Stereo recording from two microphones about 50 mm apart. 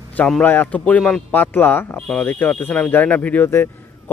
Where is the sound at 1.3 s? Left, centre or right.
Left.